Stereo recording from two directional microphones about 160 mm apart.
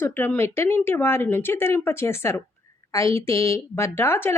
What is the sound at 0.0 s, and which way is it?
Speech, 10° left (ahead or behind).